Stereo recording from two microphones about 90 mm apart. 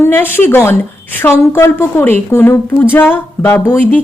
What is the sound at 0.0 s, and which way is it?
A woman's voice, 25° left (ahead or behind).